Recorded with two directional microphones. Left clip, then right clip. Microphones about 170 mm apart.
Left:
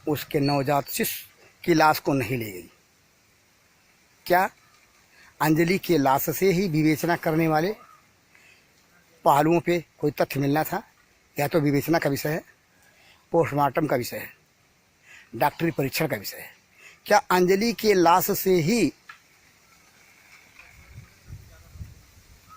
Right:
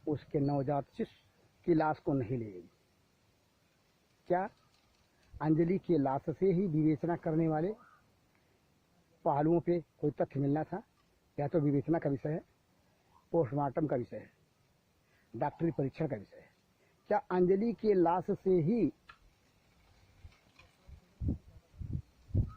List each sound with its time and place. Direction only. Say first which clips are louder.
0.1 s speech: left 10 dB; 20° left (ahead or behind)
4.3 s speech: left 12 dB; 25° left (ahead or behind)
9.2 s speech: left 11 dB; 20° left (ahead or behind)
15.4 s speech: left 11 dB; 25° left (ahead or behind)